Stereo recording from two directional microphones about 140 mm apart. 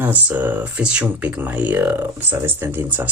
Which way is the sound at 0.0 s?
15° right (ahead or behind).